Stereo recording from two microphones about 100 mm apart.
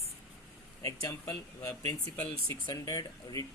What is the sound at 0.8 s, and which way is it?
Speech, 35° left (ahead or behind).